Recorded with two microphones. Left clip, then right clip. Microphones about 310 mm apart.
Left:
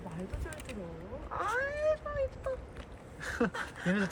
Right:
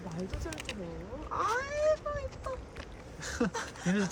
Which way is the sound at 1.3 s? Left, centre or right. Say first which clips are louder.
Right 2 dB; right.